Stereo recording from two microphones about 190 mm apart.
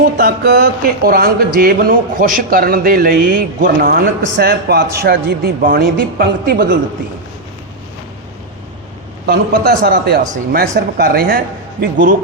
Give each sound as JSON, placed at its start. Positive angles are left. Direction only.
{"t": 0.0, "sound": "speech", "side_deg": -55}
{"t": 9.2, "sound": "speech", "side_deg": -60}